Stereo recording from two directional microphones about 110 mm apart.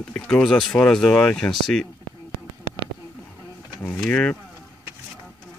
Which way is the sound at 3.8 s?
10° left (ahead or behind).